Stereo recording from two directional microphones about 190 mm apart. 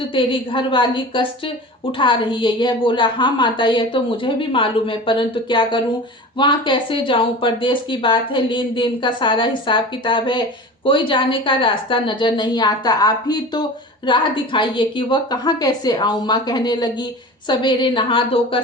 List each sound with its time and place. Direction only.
0.1 s speech: 25° left (ahead or behind)